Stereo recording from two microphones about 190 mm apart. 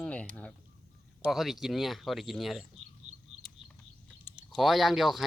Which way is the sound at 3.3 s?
90° right.